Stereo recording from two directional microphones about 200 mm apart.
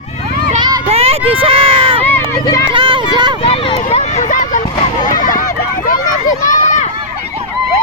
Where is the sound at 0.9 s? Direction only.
30° right (ahead or behind).